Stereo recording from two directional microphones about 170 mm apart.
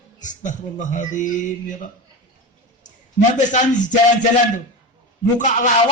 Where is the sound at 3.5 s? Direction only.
45° left (ahead or behind).